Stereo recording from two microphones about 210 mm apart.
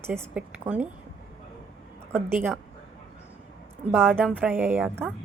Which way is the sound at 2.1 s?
10° right (ahead or behind).